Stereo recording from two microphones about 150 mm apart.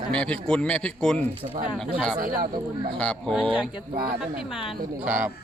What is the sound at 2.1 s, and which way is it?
Speech, 70° right (ahead or behind).